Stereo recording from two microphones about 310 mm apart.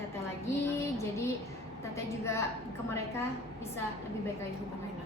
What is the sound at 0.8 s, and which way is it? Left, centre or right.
A woman's voice, centre.